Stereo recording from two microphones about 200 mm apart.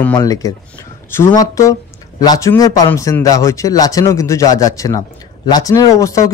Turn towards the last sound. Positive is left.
turn(degrees=15)  # may be behind; listen again after turning